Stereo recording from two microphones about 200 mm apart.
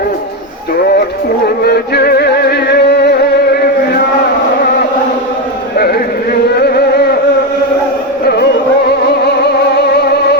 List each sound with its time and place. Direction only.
1.5 s music: 55° left (ahead or behind)
5.7 s a sound: 50° left (ahead or behind)
6.6 s music: 50° left (ahead or behind)
9.2 s music: 55° left (ahead or behind)